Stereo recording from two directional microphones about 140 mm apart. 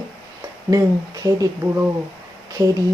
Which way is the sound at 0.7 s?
25° right (ahead or behind).